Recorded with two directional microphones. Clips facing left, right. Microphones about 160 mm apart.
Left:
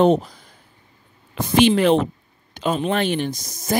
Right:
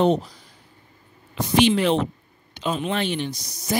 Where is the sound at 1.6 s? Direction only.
50° left (ahead or behind).